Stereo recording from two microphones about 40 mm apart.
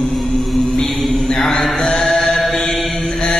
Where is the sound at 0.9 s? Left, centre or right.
Centre.